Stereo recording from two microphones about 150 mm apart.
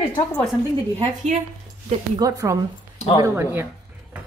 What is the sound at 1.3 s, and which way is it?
Speech, 50° right (ahead or behind).